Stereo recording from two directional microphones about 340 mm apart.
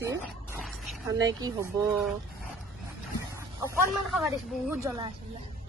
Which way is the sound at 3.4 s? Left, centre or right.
Centre.